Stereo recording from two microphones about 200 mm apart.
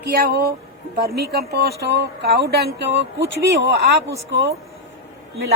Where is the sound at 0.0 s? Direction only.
50° right (ahead or behind).